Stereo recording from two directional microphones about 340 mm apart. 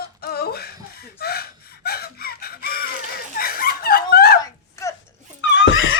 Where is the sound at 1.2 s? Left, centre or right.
Left.